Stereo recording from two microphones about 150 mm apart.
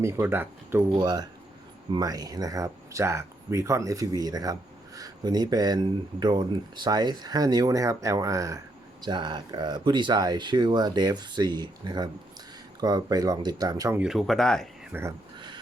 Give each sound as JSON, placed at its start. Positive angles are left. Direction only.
{"t": 0.0, "sound": "speech", "side_deg": -15}
{"t": 0.9, "sound": "speech", "side_deg": -25}
{"t": 13.9, "sound": "speech", "side_deg": -5}
{"t": 14.9, "sound": "speech", "side_deg": -15}
{"t": 15.4, "sound": "a sound", "side_deg": -30}